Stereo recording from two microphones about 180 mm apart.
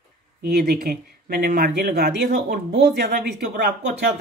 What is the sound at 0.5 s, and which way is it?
Speech, 60° right (ahead or behind).